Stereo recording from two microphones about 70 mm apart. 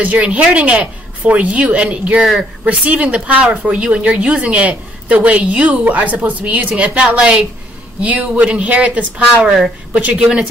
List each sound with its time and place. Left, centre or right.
0.0 s speech: right